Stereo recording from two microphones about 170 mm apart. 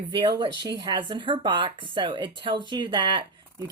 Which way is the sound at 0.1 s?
25° right (ahead or behind).